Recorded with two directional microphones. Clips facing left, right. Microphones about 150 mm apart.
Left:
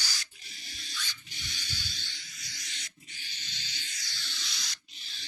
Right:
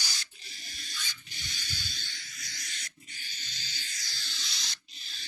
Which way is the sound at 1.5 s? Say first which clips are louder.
Even; 45° right (ahead or behind).